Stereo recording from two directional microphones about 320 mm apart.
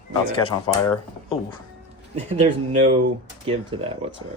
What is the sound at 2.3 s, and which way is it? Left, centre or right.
Speech, centre.